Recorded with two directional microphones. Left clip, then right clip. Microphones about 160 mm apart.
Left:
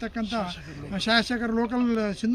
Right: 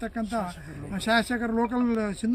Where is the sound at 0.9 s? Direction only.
Centre (ahead or behind).